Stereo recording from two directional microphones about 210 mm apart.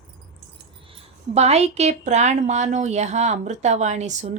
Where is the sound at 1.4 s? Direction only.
30° right (ahead or behind).